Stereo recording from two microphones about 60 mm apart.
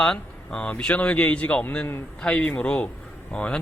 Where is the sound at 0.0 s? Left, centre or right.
Centre.